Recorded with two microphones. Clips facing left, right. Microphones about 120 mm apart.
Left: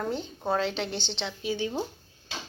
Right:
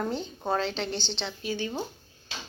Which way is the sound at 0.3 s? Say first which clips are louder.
Left 2 dB; 5° left (ahead or behind).